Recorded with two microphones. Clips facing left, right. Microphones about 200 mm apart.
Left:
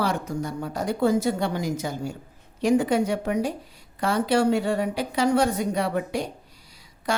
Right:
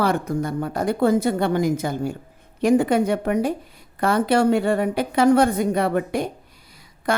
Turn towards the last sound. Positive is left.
turn(degrees=-55)  # may be behind; listen again after turning